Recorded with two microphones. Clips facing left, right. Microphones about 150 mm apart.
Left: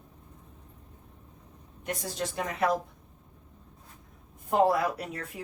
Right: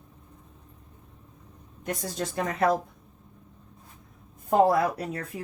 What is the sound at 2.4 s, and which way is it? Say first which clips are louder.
Speech: right 4 dB; 45° right (ahead or behind).